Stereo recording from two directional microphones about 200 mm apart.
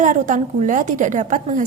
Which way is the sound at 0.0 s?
40° right (ahead or behind).